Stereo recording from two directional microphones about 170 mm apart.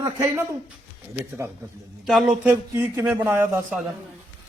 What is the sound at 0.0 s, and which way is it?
Speech, 15° right (ahead or behind).